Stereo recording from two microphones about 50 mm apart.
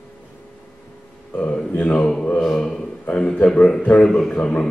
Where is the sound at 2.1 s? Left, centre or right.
Centre.